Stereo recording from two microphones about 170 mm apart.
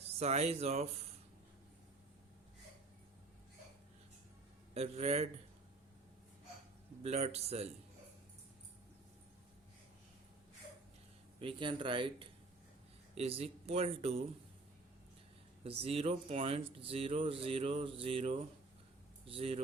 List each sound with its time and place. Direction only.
0.2 s speech: 40° right (ahead or behind)
4.7 s speech: 40° right (ahead or behind)
7.0 s speech: 40° right (ahead or behind)
11.3 s speech: 30° right (ahead or behind)
15.6 s speech: 35° right (ahead or behind)